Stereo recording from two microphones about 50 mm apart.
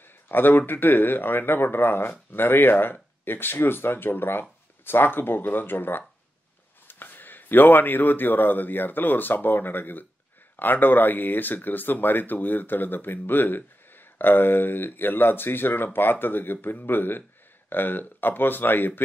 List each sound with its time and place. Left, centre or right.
0.3 s speech: left